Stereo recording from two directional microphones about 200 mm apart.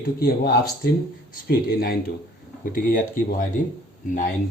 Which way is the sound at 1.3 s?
50° left (ahead or behind).